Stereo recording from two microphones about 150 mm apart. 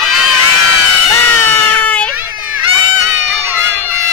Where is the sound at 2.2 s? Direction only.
10° right (ahead or behind).